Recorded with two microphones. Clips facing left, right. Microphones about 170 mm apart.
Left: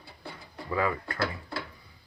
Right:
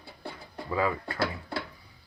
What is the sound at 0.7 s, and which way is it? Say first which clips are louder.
Speech: even; 15° right (ahead or behind).